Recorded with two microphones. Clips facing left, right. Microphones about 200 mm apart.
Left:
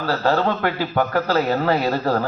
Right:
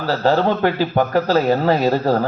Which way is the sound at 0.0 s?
15° right (ahead or behind).